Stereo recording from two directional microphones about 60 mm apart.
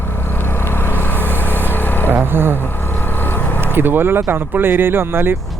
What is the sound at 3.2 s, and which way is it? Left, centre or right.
Vehicle, left.